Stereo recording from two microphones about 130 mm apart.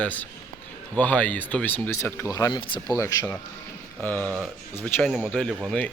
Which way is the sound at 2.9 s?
25° left (ahead or behind).